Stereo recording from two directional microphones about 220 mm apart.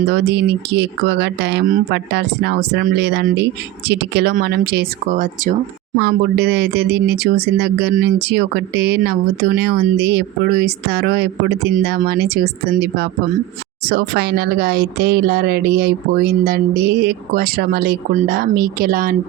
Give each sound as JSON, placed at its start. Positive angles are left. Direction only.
{"t": 0.1, "sound": "speech", "side_deg": -45}